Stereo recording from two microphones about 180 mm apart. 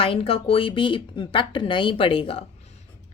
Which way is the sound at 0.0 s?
30° left (ahead or behind).